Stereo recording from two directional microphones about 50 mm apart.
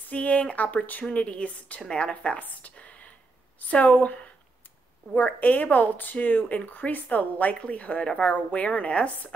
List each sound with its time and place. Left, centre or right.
0.1 s a woman's voice: left
2.4 s a sound: left
3.5 s a woman's voice: left